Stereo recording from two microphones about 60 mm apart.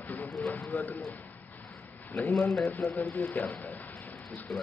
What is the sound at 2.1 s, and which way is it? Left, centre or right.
Speech, left.